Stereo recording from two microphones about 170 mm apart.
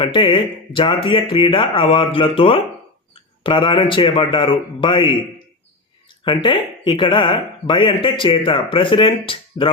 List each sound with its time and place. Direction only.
0.0 s speech: 30° left (ahead or behind)
6.2 s speech: 30° left (ahead or behind)